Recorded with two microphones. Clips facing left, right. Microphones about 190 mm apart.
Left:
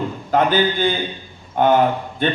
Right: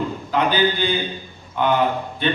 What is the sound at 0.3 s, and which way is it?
A man's voice, 45° left (ahead or behind).